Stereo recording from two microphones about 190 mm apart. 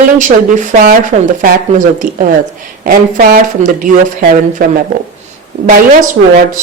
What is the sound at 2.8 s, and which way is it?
Speech, 50° right (ahead or behind).